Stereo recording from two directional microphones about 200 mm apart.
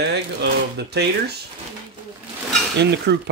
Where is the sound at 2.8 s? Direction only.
60° right (ahead or behind).